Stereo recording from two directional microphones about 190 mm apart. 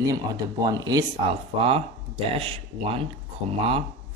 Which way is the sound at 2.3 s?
30° right (ahead or behind).